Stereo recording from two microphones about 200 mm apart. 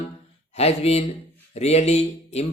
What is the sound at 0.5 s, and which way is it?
Speech, 30° left (ahead or behind).